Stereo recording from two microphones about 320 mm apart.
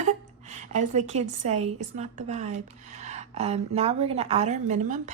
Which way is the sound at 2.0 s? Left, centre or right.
Right.